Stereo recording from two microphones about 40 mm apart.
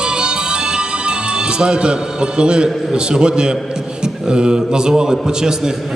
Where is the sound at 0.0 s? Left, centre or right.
Right.